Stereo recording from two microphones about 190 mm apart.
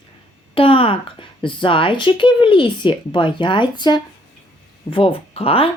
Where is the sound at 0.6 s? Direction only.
30° left (ahead or behind).